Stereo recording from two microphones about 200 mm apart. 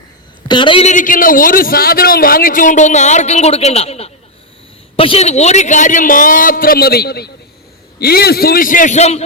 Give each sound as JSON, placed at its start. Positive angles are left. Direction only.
{"t": 0.4, "sound": "a man's voice", "side_deg": 25}